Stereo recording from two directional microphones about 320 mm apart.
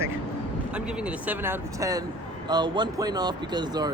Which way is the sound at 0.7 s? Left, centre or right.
Centre.